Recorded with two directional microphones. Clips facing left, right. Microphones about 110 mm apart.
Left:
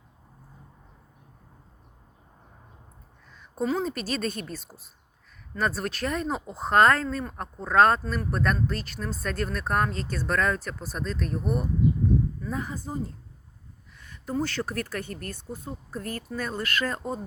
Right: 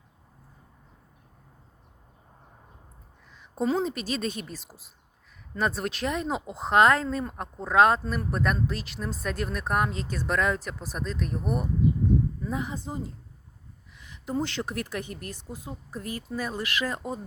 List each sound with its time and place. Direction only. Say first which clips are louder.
3.6 s a woman's voice: right 1 dB; 30° right (ahead or behind); by 17.2 s 10° right (ahead or behind)